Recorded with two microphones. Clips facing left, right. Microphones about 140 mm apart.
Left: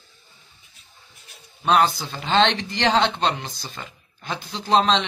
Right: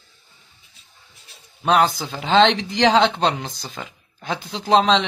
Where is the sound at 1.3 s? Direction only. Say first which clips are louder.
Right 1 dB; 40° right (ahead or behind).